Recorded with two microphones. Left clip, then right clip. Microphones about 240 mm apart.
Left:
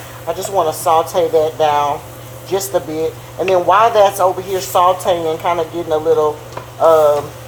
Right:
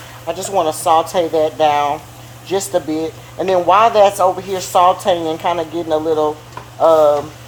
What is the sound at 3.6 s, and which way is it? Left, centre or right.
A woman's voice, right.